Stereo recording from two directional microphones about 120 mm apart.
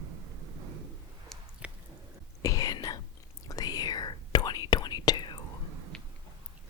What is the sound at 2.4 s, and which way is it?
Whispering, 30° left (ahead or behind).